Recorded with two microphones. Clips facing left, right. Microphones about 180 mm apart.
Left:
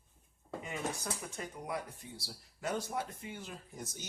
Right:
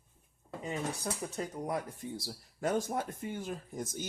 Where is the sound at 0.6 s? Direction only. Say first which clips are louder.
Right 4 dB; 35° right (ahead or behind).